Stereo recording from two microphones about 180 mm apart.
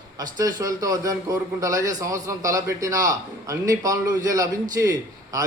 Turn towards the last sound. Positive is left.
turn(degrees=-20)  # may be behind; listen again after turning